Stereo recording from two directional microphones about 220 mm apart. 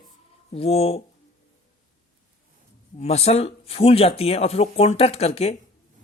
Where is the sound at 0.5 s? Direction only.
25° left (ahead or behind).